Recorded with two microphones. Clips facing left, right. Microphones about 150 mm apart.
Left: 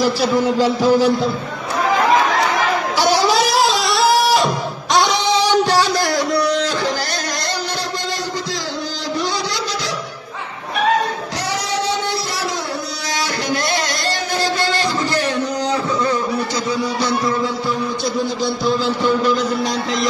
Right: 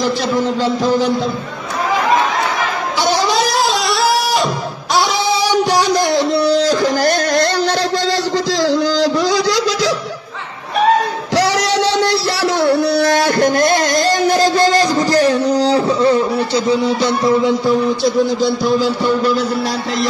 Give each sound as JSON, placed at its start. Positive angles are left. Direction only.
{"t": 0.0, "sound": "a man's voice", "side_deg": 10}
{"t": 3.0, "sound": "music", "side_deg": 10}
{"t": 4.9, "sound": "a sound", "side_deg": -10}
{"t": 8.6, "sound": "music", "side_deg": -90}
{"t": 11.3, "sound": "music", "side_deg": -90}